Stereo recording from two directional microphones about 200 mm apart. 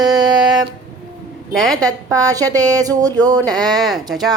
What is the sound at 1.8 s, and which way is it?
A woman's voice, 20° right (ahead or behind).